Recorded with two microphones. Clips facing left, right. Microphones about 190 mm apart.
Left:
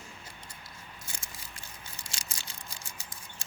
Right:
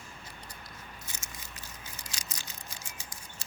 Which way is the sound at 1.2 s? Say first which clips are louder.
Right 1 dB; 30° left (ahead or behind).